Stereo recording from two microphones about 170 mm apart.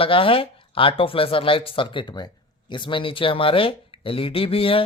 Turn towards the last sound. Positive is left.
turn(degrees=35)  # may be behind; listen again after turning